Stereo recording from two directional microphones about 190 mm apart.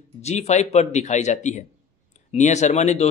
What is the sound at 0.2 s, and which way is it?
A man's voice, 35° left (ahead or behind).